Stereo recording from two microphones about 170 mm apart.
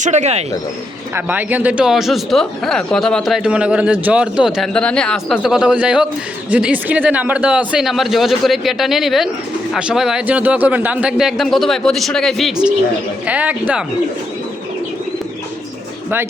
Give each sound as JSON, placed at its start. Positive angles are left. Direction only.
{"t": 0.0, "sound": "speech", "side_deg": -40}
{"t": 1.1, "sound": "speech", "side_deg": -10}